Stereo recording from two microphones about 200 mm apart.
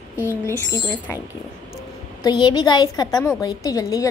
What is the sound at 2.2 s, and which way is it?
A woman's voice, 20° left (ahead or behind).